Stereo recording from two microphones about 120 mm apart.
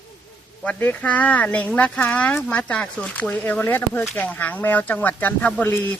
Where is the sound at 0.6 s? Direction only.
15° left (ahead or behind).